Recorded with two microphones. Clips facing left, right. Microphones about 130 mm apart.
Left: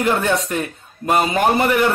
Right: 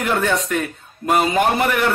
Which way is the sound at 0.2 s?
5° left (ahead or behind).